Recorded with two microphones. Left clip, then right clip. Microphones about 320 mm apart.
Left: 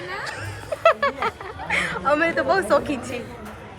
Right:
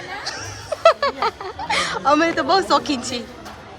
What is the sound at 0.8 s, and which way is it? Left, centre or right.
Speech, centre.